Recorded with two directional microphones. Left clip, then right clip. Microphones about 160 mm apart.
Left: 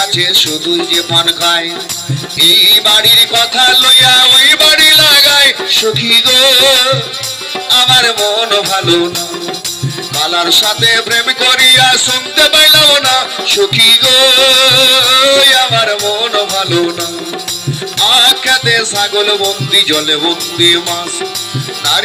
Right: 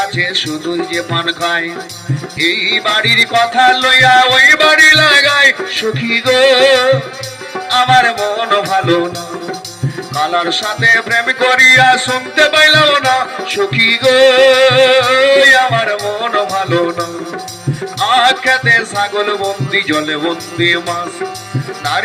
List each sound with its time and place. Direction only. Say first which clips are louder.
0.0 s music: left 5 dB; 30° right (ahead or behind)
10.2 s music: left 6 dB; 30° right (ahead or behind)
18.0 s music: left 2 dB; 25° right (ahead or behind)